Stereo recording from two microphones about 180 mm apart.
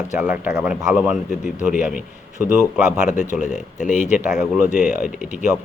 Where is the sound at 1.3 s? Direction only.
40° left (ahead or behind).